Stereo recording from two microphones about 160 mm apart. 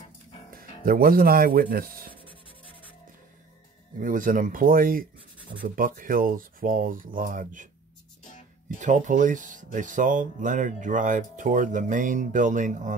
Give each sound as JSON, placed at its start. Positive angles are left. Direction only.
{"t": 0.5, "sound": "speech", "side_deg": -65}
{"t": 4.0, "sound": "speech", "side_deg": -55}
{"t": 8.2, "sound": "music", "side_deg": 50}
{"t": 8.6, "sound": "speech", "side_deg": -50}